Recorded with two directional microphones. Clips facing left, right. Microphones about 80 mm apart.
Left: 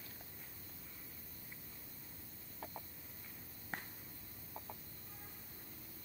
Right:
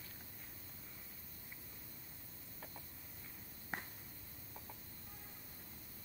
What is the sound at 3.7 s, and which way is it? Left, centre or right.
Finger snapping, centre.